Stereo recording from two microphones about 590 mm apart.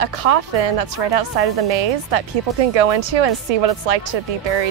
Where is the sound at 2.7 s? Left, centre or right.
Right.